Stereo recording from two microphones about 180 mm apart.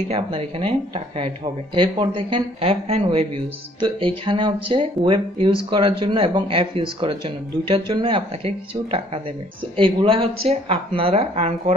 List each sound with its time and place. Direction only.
0.1 s speech: 30° right (ahead or behind)